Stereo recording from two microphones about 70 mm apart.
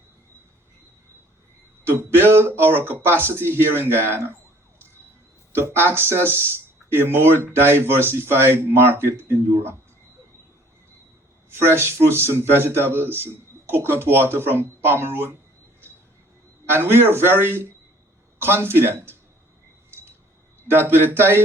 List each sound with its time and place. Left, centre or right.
1.9 s speech: right
5.5 s speech: right
11.5 s speech: right
16.7 s speech: right
20.7 s speech: right